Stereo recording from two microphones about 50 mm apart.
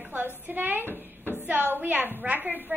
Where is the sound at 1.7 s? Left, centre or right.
Right.